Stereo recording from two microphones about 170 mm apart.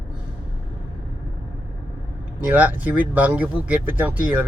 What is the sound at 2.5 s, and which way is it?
Speech, 10° right (ahead or behind).